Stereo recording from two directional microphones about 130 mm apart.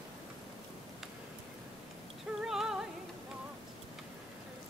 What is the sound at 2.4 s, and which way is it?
Music, 5° right (ahead or behind).